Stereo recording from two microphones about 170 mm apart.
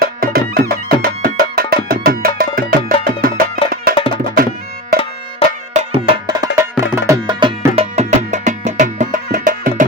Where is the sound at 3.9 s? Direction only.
30° left (ahead or behind).